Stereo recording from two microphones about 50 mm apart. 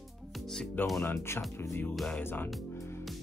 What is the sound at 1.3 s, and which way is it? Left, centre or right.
Speech, left.